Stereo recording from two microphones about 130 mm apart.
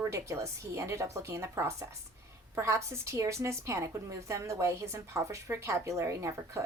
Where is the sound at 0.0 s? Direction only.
20° right (ahead or behind).